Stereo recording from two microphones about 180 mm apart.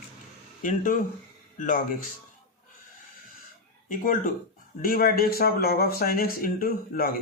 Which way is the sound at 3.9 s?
45° left (ahead or behind).